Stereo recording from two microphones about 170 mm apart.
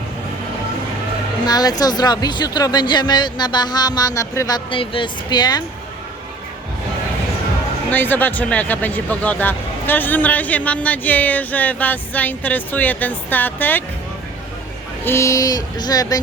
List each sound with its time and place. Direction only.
1.5 s speech: 20° left (ahead or behind)
7.9 s speech: 10° left (ahead or behind)
15.0 s speech: 15° left (ahead or behind)